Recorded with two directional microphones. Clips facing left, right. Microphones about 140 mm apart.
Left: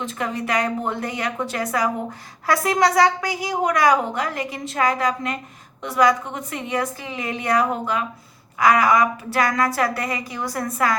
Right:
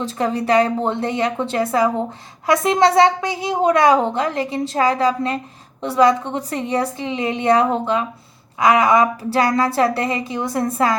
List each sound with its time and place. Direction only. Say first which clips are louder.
0.0 s a woman's voice: right 5 dB; 30° right (ahead or behind)